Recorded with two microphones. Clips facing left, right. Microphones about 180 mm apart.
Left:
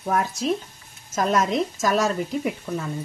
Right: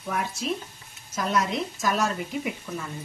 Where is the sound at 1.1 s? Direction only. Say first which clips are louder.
Left 5 dB; 45° left (ahead or behind).